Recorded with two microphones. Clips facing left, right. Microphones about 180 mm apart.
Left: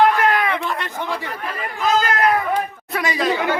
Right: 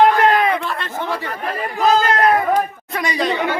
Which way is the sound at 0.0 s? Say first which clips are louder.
Right 3 dB; 25° right (ahead or behind).